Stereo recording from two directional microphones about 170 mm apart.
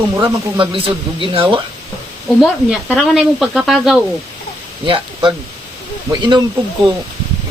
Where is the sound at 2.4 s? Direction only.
Centre (ahead or behind).